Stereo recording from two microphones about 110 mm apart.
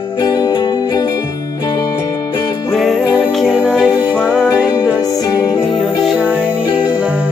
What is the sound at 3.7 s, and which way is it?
Music, 5° right (ahead or behind).